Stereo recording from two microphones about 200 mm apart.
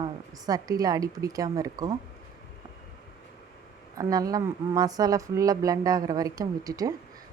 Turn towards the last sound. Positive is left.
turn(degrees=-20)  # may be behind; listen again after turning